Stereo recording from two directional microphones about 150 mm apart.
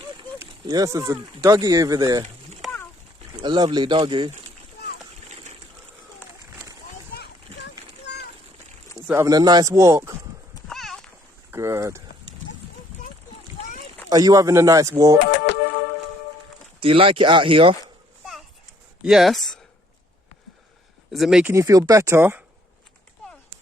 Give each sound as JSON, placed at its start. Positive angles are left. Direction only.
{"t": 0.3, "sound": "speech", "side_deg": -20}
{"t": 2.6, "sound": "a sound", "side_deg": 0}
{"t": 3.4, "sound": "speech", "side_deg": -30}
{"t": 5.3, "sound": "a sound", "side_deg": -50}
{"t": 9.1, "sound": "speech", "side_deg": -25}
{"t": 10.7, "sound": "a sound", "side_deg": 0}
{"t": 11.5, "sound": "speech", "side_deg": -20}
{"t": 14.1, "sound": "speech", "side_deg": -25}
{"t": 16.8, "sound": "speech", "side_deg": -35}
{"t": 19.0, "sound": "speech", "side_deg": 0}
{"t": 21.1, "sound": "speech", "side_deg": 0}
{"t": 21.5, "sound": "speech", "side_deg": -20}